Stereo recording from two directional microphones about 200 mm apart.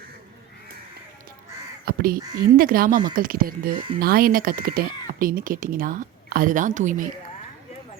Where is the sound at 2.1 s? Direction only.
20° right (ahead or behind).